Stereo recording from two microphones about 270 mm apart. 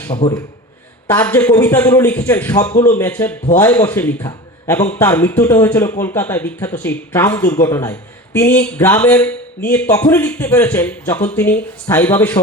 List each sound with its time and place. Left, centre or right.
0.2 s a man's voice: centre